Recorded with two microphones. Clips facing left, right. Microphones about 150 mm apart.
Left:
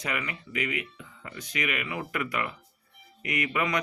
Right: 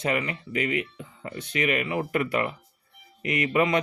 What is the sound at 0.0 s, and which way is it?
Speech, 30° right (ahead or behind).